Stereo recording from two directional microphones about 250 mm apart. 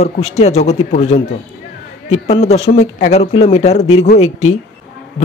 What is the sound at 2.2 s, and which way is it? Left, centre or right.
Speech, left.